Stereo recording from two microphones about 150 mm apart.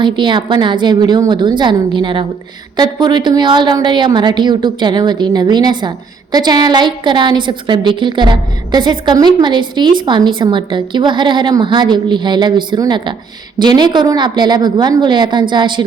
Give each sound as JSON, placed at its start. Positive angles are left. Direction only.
{"t": 0.0, "sound": "a woman's voice", "side_deg": -30}